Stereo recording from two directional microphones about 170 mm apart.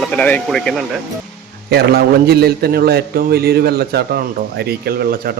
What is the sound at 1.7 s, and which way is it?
A man's voice, 70° right (ahead or behind).